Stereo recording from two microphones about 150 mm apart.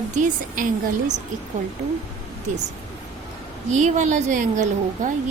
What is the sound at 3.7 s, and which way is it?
A woman's voice, 55° right (ahead or behind).